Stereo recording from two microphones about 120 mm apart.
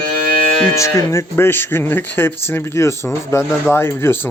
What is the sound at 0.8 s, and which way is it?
Speech, 25° left (ahead or behind).